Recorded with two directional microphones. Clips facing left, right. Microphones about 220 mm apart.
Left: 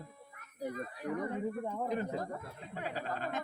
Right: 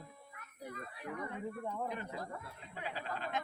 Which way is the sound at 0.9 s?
40° left (ahead or behind).